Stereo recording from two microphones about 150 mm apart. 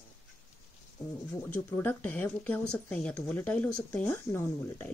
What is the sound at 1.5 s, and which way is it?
Speech, 10° left (ahead or behind).